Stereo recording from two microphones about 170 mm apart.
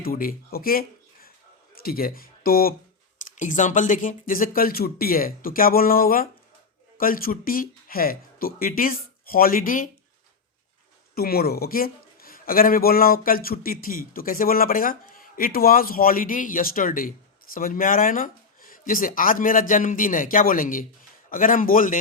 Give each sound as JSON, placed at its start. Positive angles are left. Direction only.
{"t": 0.0, "sound": "speech", "side_deg": 60}
{"t": 3.2, "sound": "a man's voice", "side_deg": 50}
{"t": 11.1, "sound": "a man's voice", "side_deg": 65}